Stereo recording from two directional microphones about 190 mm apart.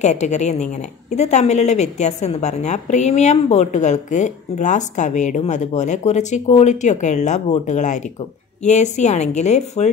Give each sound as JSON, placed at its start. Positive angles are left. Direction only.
{"t": 0.0, "sound": "a woman's voice", "side_deg": 40}